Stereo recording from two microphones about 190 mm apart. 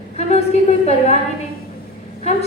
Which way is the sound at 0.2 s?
35° left (ahead or behind).